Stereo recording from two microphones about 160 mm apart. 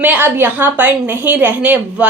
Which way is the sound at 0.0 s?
10° right (ahead or behind).